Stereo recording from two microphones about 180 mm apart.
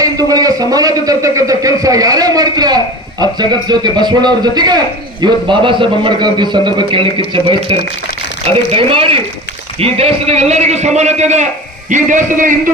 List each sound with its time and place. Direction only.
0.0 s a man's voice: 20° right (ahead or behind); by 12.7 s 45° right (ahead or behind)